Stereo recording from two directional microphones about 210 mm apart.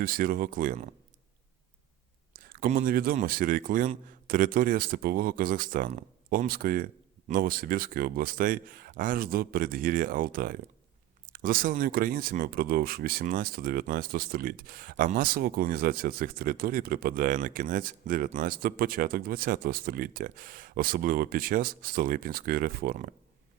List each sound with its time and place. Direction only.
0.0 s speech: 45° right (ahead or behind)
2.4 s speech: 40° right (ahead or behind)